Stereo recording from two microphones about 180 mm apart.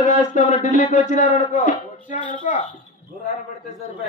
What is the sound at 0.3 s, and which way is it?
Speech, 40° left (ahead or behind).